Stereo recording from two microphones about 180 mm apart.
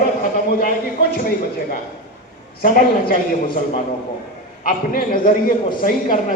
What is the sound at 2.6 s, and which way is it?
Speech, 55° left (ahead or behind).